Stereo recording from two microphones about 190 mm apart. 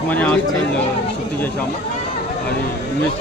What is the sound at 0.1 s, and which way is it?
Speech, 10° left (ahead or behind).